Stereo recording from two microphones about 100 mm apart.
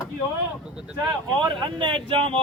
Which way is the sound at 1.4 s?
50° right (ahead or behind).